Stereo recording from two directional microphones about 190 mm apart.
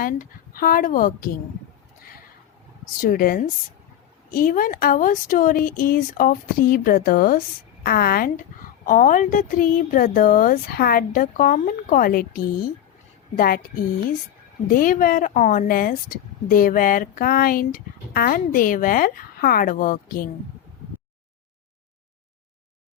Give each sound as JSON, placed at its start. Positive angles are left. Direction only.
{"t": 0.0, "sound": "speech", "side_deg": 45}
{"t": 3.0, "sound": "speech", "side_deg": 50}
{"t": 14.7, "sound": "speech", "side_deg": 45}